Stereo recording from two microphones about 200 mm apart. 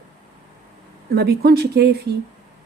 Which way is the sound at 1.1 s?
55° right (ahead or behind).